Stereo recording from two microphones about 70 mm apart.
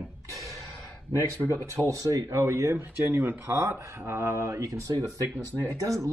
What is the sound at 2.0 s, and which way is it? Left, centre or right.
Speech, right.